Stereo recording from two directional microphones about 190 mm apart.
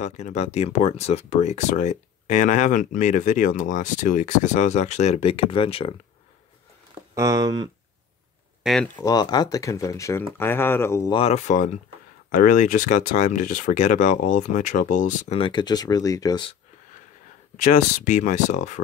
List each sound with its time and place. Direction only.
0.0 s speech: 35° left (ahead or behind)
7.2 s speech: 20° right (ahead or behind)
8.6 s speech: 5° left (ahead or behind)
9.1 s speech: 20° left (ahead or behind)
11.1 s speech: 35° left (ahead or behind)
17.6 s speech: 40° left (ahead or behind)